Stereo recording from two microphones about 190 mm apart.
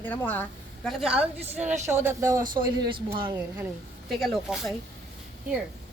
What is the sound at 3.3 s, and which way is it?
Speech, 10° right (ahead or behind).